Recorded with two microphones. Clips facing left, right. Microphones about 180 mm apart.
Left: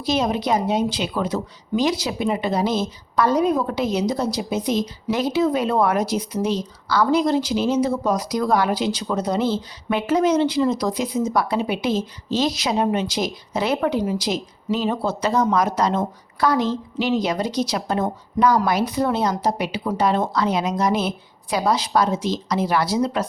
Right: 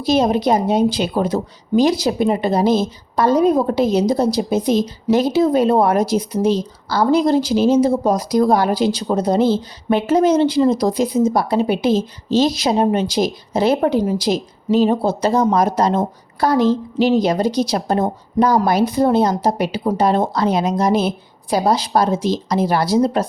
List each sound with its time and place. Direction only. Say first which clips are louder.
0.1 s a woman's voice: right 5 dB; 35° right (ahead or behind)
14.0 s a woman's voice: right 5 dB; 40° right (ahead or behind)
20.7 s a woman's voice: right 4 dB; 30° right (ahead or behind)